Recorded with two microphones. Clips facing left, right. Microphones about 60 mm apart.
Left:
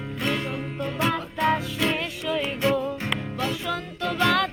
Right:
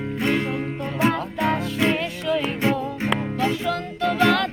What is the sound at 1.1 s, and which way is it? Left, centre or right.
Music, centre.